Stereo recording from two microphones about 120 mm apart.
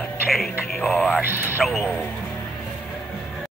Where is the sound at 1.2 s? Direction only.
20° right (ahead or behind).